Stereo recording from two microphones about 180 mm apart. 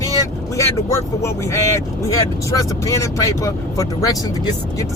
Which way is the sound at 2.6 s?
15° left (ahead or behind).